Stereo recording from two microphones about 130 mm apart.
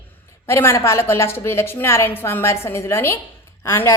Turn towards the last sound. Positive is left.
turn(degrees=20)  # may be behind; listen again after turning